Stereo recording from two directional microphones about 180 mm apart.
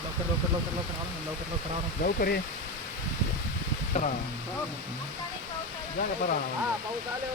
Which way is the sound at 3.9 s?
40° left (ahead or behind).